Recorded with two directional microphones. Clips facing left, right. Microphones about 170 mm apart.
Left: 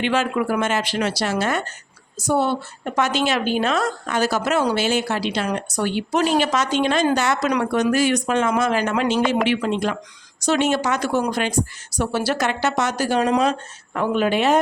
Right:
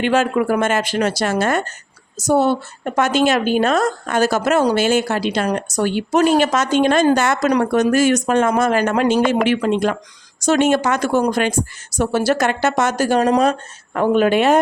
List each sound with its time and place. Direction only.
0.0 s a woman's voice: 45° right (ahead or behind)